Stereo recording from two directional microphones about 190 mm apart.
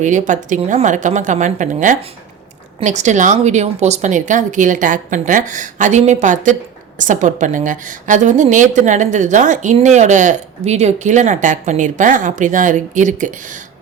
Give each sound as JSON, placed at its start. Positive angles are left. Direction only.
{"t": 0.0, "sound": "a woman's voice", "side_deg": -40}